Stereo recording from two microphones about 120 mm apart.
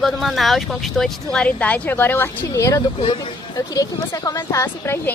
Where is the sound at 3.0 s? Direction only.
45° left (ahead or behind).